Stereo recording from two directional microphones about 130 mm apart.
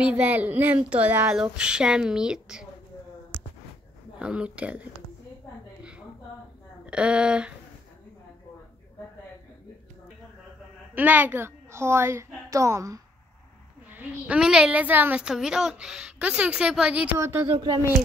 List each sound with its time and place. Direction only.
0.0 s a woman's voice: 10° right (ahead or behind)
4.2 s a woman's voice: 10° right (ahead or behind)
6.9 s a woman's voice: 5° right (ahead or behind)
11.0 s a woman's voice: 15° right (ahead or behind)
13.8 s a woman's voice: 10° right (ahead or behind)
17.2 s a woman's voice: 20° right (ahead or behind)